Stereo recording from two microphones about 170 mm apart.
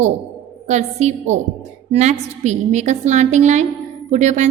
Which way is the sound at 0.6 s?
40° right (ahead or behind).